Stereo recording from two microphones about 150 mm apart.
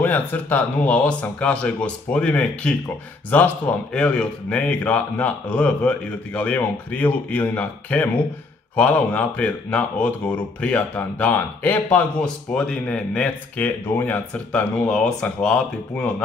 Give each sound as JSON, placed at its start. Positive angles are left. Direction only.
{"t": 0.0, "sound": "speech", "side_deg": 10}